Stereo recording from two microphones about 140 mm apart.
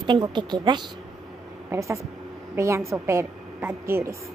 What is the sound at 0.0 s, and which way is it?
Speech, 35° right (ahead or behind).